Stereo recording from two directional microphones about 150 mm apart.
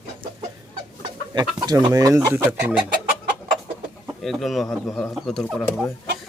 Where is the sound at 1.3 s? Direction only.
30° right (ahead or behind).